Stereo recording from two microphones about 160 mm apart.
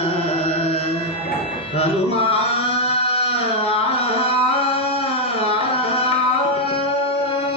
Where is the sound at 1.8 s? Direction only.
35° left (ahead or behind).